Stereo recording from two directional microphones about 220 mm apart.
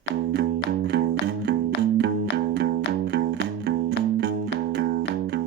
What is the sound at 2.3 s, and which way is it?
Music, 50° right (ahead or behind).